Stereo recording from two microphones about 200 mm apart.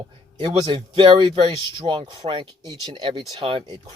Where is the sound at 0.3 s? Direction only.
25° right (ahead or behind).